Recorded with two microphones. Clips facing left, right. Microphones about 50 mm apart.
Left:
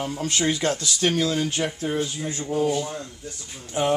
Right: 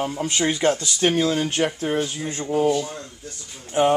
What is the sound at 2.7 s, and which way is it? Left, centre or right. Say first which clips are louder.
Speech: right 1 dB; centre.